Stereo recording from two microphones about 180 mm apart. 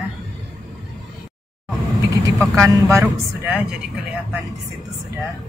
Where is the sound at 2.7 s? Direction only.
15° right (ahead or behind).